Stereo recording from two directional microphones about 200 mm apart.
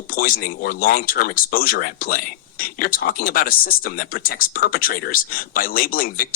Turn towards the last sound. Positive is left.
turn(degrees=45)  # may be behind; listen again after turning